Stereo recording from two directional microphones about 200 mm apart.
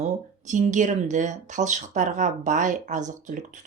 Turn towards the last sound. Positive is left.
turn(degrees=-40)  # may be behind; listen again after turning